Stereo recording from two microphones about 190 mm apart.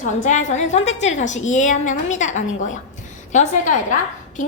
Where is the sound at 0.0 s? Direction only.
40° left (ahead or behind).